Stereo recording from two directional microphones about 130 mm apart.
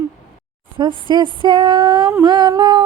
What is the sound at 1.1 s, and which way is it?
Music, 35° right (ahead or behind).